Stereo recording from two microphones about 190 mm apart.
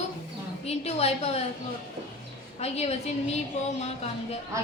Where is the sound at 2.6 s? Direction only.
35° left (ahead or behind).